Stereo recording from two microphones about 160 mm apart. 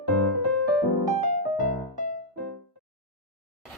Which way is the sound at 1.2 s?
50° left (ahead or behind).